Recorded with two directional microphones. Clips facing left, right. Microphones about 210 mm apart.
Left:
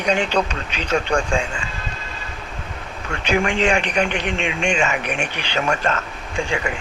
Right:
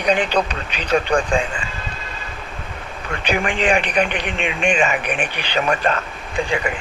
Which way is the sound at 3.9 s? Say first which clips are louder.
Right 1 dB; 55° right (ahead or behind).